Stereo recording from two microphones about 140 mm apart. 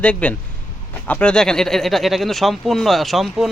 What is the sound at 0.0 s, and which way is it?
Speech, 10° left (ahead or behind).